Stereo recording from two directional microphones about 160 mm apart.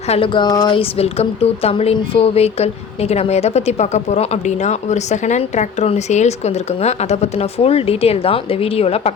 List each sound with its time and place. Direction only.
0.1 s speech: 30° left (ahead or behind)